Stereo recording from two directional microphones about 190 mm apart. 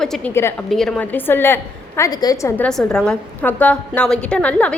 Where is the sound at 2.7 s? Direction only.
5° left (ahead or behind).